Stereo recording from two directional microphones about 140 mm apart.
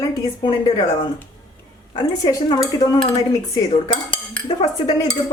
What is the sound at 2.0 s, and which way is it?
Speech, 30° left (ahead or behind).